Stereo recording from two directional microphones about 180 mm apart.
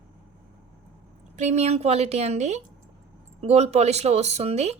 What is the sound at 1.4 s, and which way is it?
A woman's voice, 40° right (ahead or behind).